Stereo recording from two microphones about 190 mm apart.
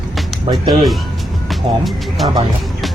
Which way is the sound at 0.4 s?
25° right (ahead or behind).